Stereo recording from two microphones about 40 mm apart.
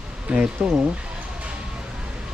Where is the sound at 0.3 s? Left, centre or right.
Right.